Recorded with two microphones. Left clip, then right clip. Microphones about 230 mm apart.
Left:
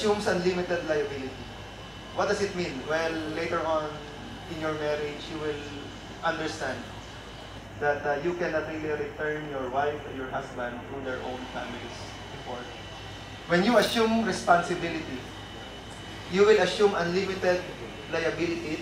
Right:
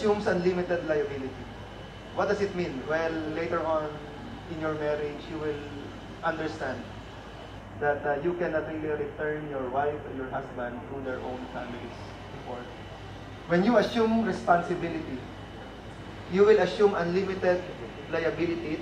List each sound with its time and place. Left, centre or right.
0.0 s a man's voice: centre
2.1 s a man's voice: centre
3.5 s a man's voice: centre
7.8 s a man's voice: centre
8.2 s a man's voice: centre
13.5 s a man's voice: centre
16.3 s a man's voice: centre